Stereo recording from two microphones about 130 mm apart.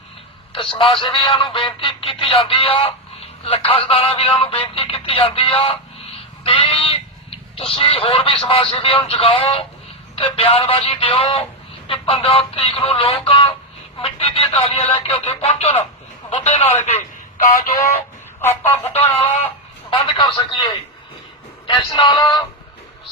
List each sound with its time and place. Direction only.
0.5 s speech: 40° left (ahead or behind)
16.8 s telephone: 75° left (ahead or behind)
18.4 s speech: 15° left (ahead or behind)
18.9 s speech: 50° left (ahead or behind)
19.9 s speech: 40° left (ahead or behind)